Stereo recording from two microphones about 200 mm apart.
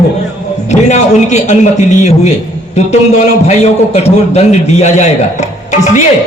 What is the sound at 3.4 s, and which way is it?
A man's voice, 35° left (ahead or behind).